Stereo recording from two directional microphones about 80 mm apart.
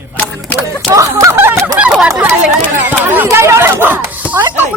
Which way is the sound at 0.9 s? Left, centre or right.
Right.